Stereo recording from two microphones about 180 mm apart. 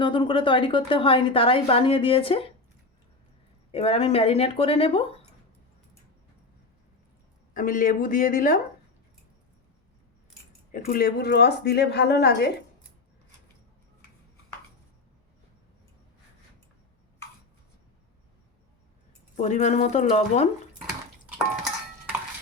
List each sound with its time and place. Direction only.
0.0 s a woman's voice: 25° left (ahead or behind)
3.7 s speech: 35° left (ahead or behind)
7.5 s speech: 50° left (ahead or behind)
10.7 s speech: 50° left (ahead or behind)
19.4 s speech: 40° left (ahead or behind)
21.2 s dishes: 5° right (ahead or behind)